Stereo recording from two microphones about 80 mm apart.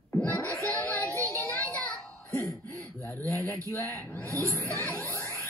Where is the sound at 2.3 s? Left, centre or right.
Left.